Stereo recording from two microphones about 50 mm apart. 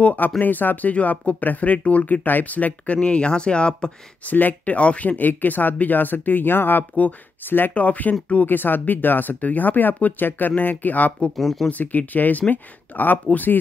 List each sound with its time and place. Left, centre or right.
0.0 s speech: left; by 3.9 s centre
4.3 s speech: left
7.7 s speech: left
8.5 s speech: left
11.3 s speech: centre
11.8 s speech: left